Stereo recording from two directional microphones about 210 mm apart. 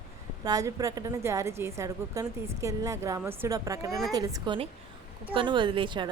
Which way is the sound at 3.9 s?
Centre (ahead or behind).